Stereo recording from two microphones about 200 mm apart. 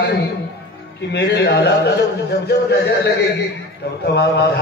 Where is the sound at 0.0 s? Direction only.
60° left (ahead or behind).